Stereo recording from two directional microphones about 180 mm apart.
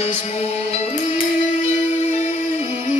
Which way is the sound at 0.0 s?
35° left (ahead or behind).